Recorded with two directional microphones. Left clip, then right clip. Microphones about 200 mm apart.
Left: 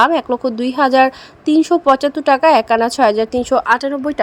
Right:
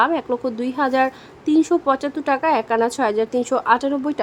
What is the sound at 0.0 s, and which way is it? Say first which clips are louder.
Speech: left 6 dB; 20° left (ahead or behind).